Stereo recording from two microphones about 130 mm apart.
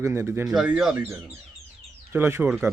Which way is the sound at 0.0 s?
20° right (ahead or behind).